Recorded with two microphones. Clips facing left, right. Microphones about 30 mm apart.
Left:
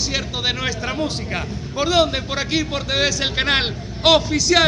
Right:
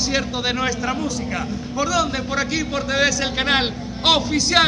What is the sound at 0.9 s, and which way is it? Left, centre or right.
A man's voice, left.